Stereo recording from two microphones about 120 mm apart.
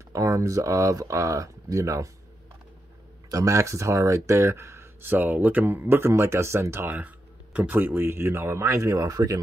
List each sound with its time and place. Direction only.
0.1 s speech: 25° right (ahead or behind)
3.3 s speech: 30° right (ahead or behind)